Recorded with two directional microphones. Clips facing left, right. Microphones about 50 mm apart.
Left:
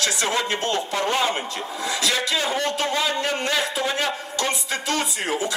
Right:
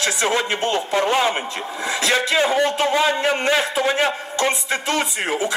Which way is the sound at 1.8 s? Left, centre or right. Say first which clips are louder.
Right 4 dB; right.